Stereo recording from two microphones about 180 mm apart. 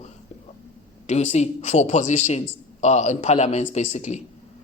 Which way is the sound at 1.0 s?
40° left (ahead or behind).